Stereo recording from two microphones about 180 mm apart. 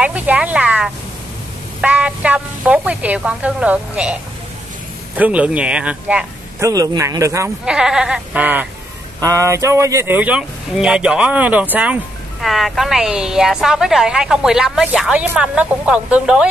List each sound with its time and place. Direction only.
0.0 s speech: 10° right (ahead or behind)
6.7 s speech: 20° right (ahead or behind)
7.6 s speech: 5° right (ahead or behind)